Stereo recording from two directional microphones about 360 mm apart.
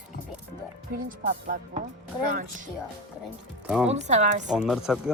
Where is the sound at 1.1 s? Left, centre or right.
Right.